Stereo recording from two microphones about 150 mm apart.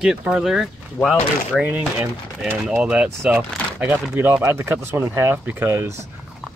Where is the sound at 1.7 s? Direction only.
10° right (ahead or behind).